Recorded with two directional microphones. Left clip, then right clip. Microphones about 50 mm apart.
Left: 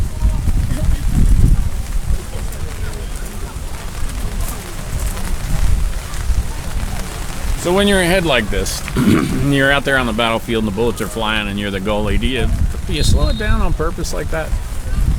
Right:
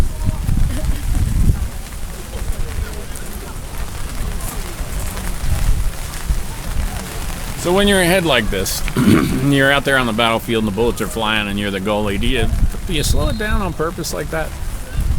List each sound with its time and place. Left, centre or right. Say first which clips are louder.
7.6 s speech: even; centre
7.9 s speech: even; right
10.5 s speech: even; right